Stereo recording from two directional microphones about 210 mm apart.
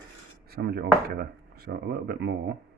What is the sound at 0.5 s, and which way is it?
Speech, 50° right (ahead or behind).